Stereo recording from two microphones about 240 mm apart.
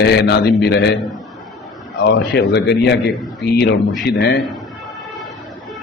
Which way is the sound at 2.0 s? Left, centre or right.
Left.